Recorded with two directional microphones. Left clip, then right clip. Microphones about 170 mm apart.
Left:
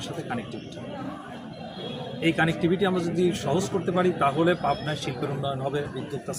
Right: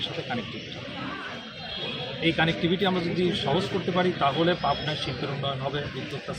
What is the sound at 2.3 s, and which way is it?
Speech, 20° left (ahead or behind).